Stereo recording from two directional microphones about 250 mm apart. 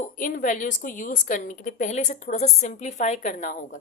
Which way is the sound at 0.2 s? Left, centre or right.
Left.